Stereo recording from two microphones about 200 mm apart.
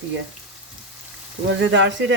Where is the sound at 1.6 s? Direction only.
65° right (ahead or behind).